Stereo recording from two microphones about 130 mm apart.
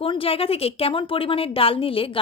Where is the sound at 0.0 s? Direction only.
45° left (ahead or behind).